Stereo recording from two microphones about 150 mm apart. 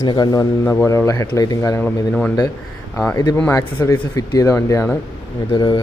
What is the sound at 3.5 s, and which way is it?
Speech, 20° left (ahead or behind).